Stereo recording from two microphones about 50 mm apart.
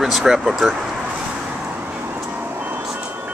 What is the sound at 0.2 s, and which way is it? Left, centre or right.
Speech, centre.